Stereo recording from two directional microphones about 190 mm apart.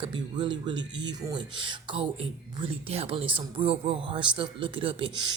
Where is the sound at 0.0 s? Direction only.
25° right (ahead or behind).